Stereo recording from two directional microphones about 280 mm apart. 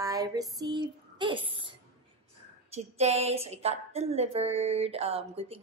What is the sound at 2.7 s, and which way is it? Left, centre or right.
A woman's voice, right.